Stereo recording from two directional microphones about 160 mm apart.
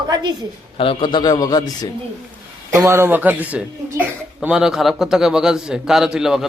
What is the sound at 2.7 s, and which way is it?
A child's voice, 15° right (ahead or behind).